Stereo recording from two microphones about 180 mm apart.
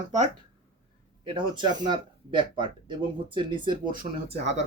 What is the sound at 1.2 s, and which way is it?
Speech, 25° right (ahead or behind).